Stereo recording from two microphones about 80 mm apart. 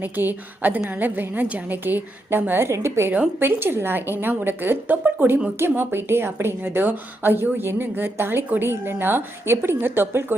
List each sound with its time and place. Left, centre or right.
0.0 s a woman's voice: right